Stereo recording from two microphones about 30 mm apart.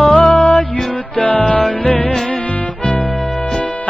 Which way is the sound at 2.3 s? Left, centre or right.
Left.